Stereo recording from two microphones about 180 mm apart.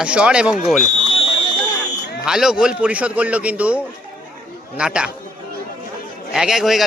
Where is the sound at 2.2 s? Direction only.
5° right (ahead or behind).